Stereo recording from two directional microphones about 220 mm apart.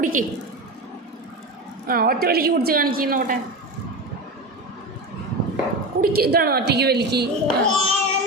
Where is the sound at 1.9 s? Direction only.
40° right (ahead or behind).